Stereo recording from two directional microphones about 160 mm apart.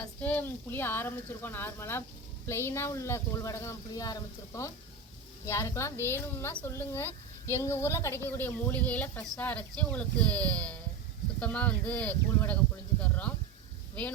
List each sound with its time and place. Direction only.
0.2 s a woman's voice: 10° left (ahead or behind)